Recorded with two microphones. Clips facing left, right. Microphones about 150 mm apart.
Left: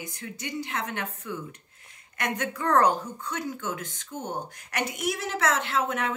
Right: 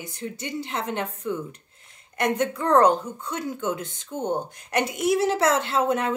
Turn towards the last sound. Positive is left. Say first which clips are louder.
# right 5 dB
turn(degrees=-35)  # may be behind; listen again after turning